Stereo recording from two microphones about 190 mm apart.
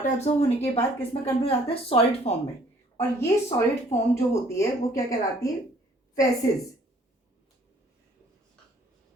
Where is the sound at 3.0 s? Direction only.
15° left (ahead or behind).